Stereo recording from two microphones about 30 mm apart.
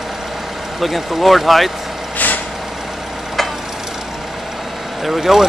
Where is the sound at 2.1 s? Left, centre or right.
Left.